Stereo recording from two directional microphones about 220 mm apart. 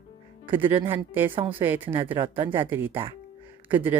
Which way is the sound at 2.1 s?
25° right (ahead or behind).